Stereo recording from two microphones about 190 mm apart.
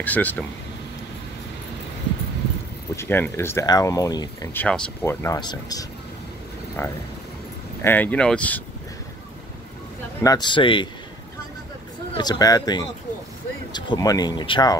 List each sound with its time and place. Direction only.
0.0 s speech: 10° left (ahead or behind)
3.0 s speech: 10° left (ahead or behind)
4.6 s speech: 5° left (ahead or behind)
10.2 s speech: 25° left (ahead or behind)
12.1 s speech: 20° left (ahead or behind)